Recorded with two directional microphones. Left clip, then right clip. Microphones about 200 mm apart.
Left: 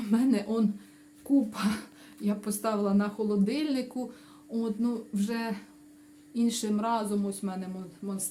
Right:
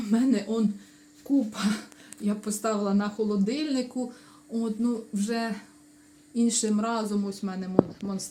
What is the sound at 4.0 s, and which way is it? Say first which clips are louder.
Speech: right 3 dB; centre (ahead or behind).